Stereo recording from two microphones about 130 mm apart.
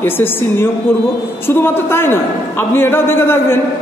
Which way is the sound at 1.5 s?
15° left (ahead or behind).